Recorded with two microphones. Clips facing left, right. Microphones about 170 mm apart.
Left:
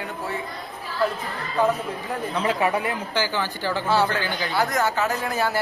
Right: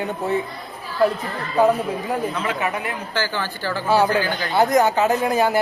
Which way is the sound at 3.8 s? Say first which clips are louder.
Right 5 dB; 10° right (ahead or behind).